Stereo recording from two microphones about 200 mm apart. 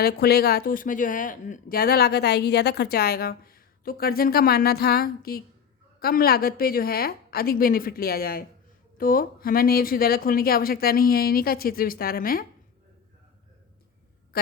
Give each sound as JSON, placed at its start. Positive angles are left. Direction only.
{"t": 0.0, "sound": "speech", "side_deg": 50}